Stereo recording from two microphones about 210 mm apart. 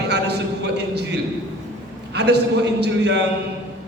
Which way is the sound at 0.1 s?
55° right (ahead or behind).